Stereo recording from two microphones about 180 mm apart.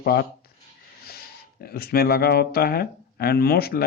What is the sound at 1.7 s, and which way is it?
Speech, 60° left (ahead or behind).